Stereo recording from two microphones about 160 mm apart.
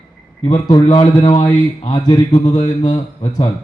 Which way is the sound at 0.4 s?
25° left (ahead or behind).